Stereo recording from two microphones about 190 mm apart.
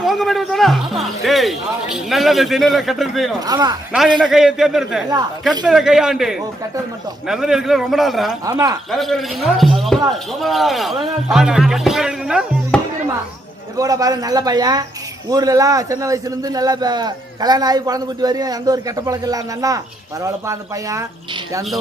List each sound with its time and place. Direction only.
0.0 s speech: centre (ahead or behind)
3.4 s a man's voice: 20° right (ahead or behind)
4.2 s speech: centre (ahead or behind)
8.4 s speech: 15° right (ahead or behind)
8.9 s speech: centre (ahead or behind)
13.7 s a man's voice: 20° right (ahead or behind)